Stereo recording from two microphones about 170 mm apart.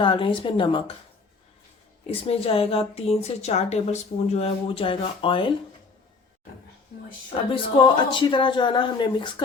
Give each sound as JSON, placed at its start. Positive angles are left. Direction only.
{"t": 0.0, "sound": "speech", "side_deg": 30}
{"t": 2.0, "sound": "a woman's voice", "side_deg": 35}
{"t": 7.5, "sound": "speech", "side_deg": 30}